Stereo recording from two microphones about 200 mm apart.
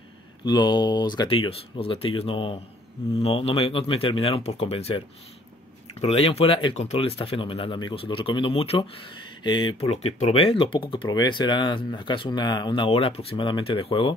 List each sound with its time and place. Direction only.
0.5 s speech: 20° left (ahead or behind)